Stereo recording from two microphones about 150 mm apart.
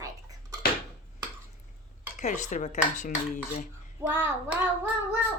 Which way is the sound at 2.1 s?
55° left (ahead or behind).